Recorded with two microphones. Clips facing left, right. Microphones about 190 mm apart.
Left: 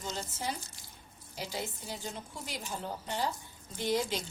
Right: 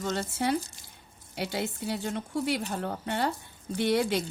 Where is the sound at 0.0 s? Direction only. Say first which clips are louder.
Right 8 dB; 65° right (ahead or behind).